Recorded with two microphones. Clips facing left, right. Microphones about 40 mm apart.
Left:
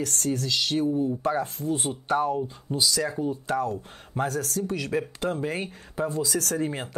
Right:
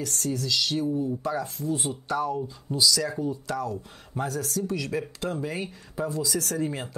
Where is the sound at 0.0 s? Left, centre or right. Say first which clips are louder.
Left 2 dB; left.